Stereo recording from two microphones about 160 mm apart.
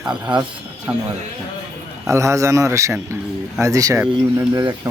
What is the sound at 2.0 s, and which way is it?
Speech, 20° right (ahead or behind).